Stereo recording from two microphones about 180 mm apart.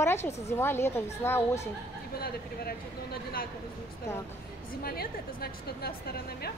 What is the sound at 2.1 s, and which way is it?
A woman's voice, 60° left (ahead or behind).